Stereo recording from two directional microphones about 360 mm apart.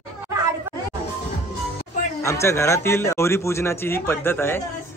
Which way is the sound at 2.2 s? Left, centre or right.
Centre.